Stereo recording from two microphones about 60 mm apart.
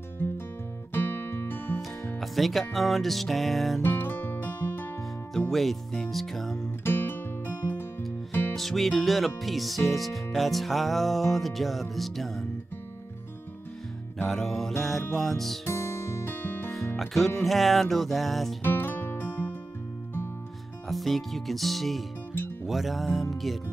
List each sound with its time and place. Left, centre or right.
0.9 s music: left
2.1 s music: centre
3.8 s music: left
5.5 s music: centre
6.8 s music: left
8.5 s music: centre
14.2 s music: centre
15.6 s music: left
16.7 s music: centre
18.6 s music: left
19.2 s music: left
20.9 s music: centre